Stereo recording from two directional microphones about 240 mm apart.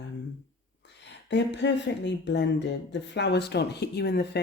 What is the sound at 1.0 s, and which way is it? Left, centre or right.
Speech, left.